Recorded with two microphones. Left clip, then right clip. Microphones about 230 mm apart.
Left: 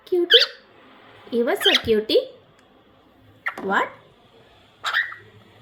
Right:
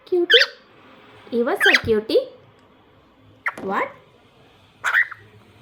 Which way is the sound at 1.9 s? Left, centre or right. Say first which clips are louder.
Even; centre.